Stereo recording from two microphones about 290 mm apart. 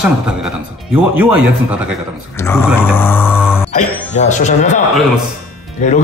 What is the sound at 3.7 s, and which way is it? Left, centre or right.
Speech, left.